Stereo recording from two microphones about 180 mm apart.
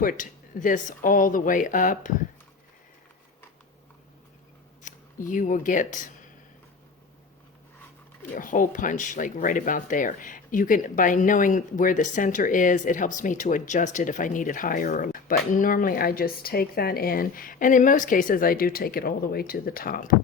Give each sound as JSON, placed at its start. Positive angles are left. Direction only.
{"t": 0.0, "sound": "speech", "side_deg": 50}
{"t": 4.8, "sound": "speech", "side_deg": 45}
{"t": 8.4, "sound": "speech", "side_deg": 50}